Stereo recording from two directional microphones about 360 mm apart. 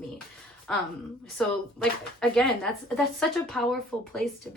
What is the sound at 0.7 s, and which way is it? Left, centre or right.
A woman's voice, centre.